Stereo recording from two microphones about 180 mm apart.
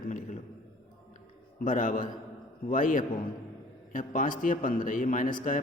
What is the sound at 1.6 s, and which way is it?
A man's voice, 45° left (ahead or behind).